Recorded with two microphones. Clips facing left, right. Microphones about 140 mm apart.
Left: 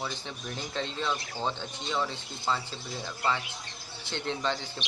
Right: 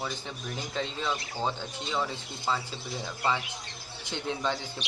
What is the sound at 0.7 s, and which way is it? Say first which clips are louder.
A man's voice: even; centre (ahead or behind).